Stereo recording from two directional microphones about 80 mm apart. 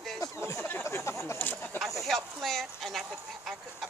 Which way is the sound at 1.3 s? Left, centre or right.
Left.